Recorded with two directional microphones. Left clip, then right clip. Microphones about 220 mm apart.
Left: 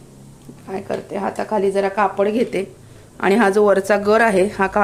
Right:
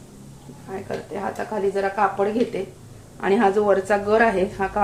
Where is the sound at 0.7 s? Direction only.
55° left (ahead or behind).